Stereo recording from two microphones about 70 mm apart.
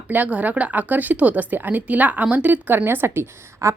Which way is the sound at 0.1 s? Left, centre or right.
Right.